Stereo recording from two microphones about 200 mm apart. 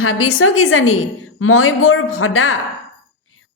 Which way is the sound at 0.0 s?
85° left.